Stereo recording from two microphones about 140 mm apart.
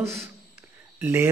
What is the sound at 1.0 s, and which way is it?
Speech, 15° right (ahead or behind).